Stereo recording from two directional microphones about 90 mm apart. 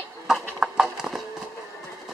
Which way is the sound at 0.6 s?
5° right (ahead or behind).